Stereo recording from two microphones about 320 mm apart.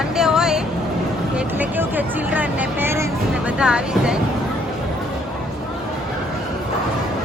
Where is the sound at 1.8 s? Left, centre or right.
Centre.